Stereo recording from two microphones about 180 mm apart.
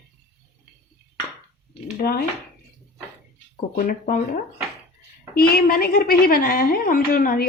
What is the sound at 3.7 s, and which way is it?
A woman's voice, 50° left (ahead or behind).